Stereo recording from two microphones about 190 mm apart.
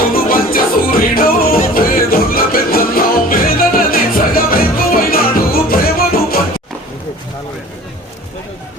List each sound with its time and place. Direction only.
0.1 s music: 50° left (ahead or behind)